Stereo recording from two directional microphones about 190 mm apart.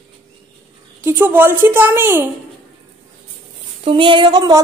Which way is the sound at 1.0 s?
10° right (ahead or behind).